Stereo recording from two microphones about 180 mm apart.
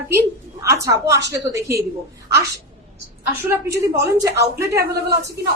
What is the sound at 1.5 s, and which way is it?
Speech, 15° right (ahead or behind).